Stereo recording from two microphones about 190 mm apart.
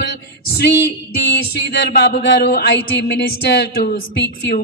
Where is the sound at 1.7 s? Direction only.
60° left (ahead or behind).